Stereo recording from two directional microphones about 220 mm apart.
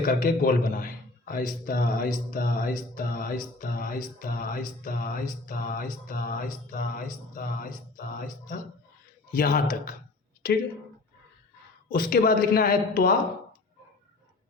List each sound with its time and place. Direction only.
0.0 s a man's voice: 40° left (ahead or behind)
11.9 s a man's voice: 40° left (ahead or behind)